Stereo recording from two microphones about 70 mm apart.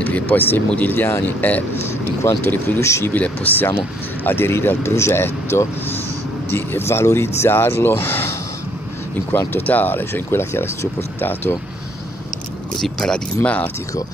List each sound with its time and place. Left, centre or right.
0.0 s speech: left
1.9 s speech: left
3.1 s speech: left
12.8 s speech: centre
13.4 s speech: left